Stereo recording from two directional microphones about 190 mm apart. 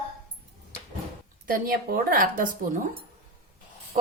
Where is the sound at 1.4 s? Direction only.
50° right (ahead or behind).